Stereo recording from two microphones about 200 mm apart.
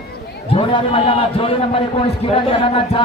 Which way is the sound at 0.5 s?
25° left (ahead or behind).